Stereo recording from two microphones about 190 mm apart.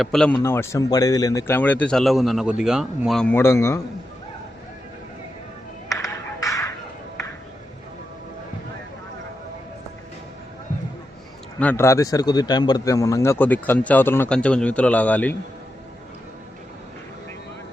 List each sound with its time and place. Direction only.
0.0 s a man's voice: 5° left (ahead or behind)
5.9 s music: 15° left (ahead or behind)
11.6 s a man's voice: 10° left (ahead or behind)